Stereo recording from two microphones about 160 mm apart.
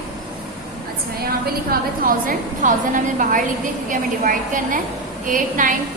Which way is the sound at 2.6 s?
55° right (ahead or behind).